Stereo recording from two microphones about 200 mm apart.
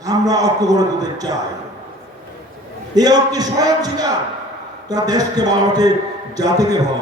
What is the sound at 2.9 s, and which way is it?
A man's voice, 20° right (ahead or behind).